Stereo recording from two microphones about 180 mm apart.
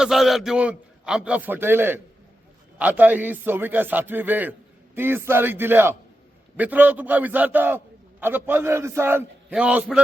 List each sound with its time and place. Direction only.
0.0 s a man's voice: centre (ahead or behind)